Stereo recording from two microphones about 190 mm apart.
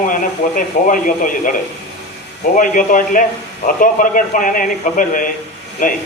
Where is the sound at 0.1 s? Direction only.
45° left (ahead or behind).